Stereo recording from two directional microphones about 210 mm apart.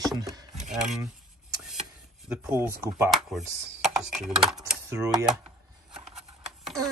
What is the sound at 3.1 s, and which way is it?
Speech, centre (ahead or behind).